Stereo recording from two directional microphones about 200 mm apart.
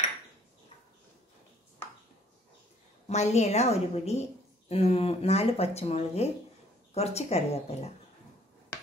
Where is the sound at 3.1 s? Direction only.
35° left (ahead or behind).